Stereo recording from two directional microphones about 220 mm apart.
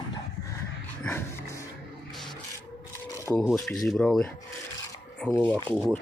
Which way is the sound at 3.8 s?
5° left (ahead or behind).